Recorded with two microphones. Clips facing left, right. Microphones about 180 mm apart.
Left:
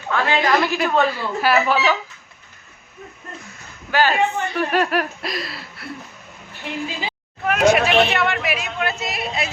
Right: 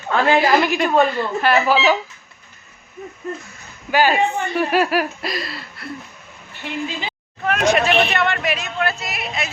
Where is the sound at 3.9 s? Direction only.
15° right (ahead or behind).